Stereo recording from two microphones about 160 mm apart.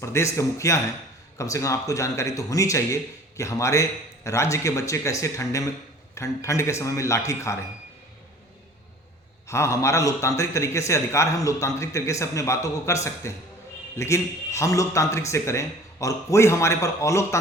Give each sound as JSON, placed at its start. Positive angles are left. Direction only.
{"t": 0.0, "sound": "a man's voice", "side_deg": 20}
{"t": 9.5, "sound": "a man's voice", "side_deg": 20}